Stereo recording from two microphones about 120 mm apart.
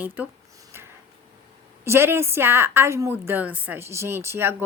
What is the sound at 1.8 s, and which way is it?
A woman's voice, 20° right (ahead or behind).